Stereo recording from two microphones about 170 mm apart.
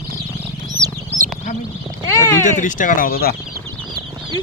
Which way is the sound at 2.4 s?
50° left (ahead or behind).